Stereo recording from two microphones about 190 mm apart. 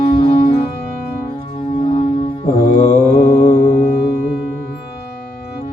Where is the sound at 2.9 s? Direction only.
40° left (ahead or behind).